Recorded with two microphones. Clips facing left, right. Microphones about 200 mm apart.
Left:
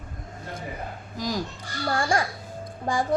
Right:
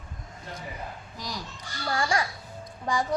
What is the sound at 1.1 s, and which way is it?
A woman's voice, 45° left (ahead or behind).